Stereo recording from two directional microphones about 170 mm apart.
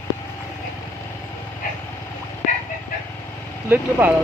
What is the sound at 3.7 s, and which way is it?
Speech, 10° right (ahead or behind).